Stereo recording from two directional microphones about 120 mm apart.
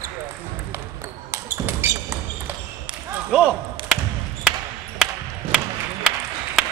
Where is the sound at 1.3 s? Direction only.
20° right (ahead or behind).